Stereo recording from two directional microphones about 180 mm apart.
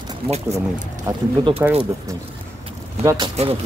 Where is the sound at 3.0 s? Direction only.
15° right (ahead or behind).